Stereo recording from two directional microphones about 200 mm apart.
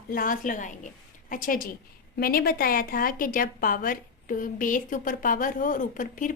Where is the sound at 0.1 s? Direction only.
45° left (ahead or behind).